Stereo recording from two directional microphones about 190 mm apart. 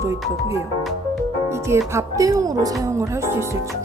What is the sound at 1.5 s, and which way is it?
Music, 15° right (ahead or behind).